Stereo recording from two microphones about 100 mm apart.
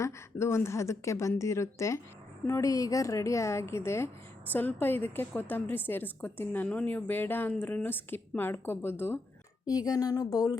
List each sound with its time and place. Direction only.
0.0 s a woman's voice: 25° left (ahead or behind)
9.6 s speech: 40° left (ahead or behind)